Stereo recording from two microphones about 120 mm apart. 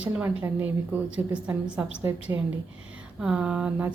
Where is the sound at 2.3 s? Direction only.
25° right (ahead or behind).